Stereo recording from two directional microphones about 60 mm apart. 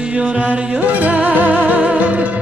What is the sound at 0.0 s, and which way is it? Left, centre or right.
Music, centre.